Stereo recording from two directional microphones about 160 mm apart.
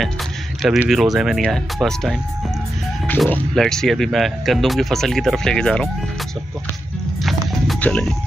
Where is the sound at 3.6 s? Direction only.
5° left (ahead or behind).